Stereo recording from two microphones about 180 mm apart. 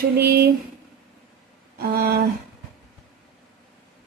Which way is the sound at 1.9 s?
60° right (ahead or behind).